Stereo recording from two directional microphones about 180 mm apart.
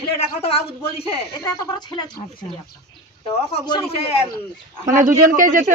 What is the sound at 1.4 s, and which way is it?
Speech, 20° left (ahead or behind).